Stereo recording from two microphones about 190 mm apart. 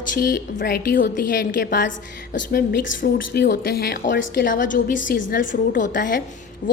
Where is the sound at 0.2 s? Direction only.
50° left (ahead or behind).